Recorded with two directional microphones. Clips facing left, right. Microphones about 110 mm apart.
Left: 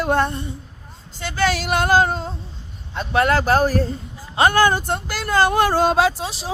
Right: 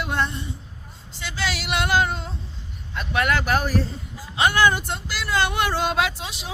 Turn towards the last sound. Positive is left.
turn(degrees=35)  # may be behind; listen again after turning